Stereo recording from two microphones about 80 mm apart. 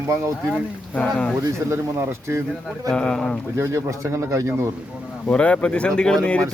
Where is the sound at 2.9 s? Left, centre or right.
Centre.